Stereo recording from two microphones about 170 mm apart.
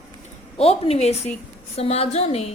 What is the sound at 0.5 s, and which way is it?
A woman's voice, 35° left (ahead or behind).